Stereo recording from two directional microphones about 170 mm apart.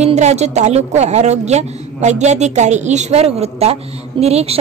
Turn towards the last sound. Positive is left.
turn(degrees=-35)  # may be behind; listen again after turning